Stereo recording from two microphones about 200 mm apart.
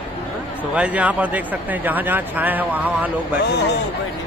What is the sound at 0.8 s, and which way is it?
Speech, 5° right (ahead or behind).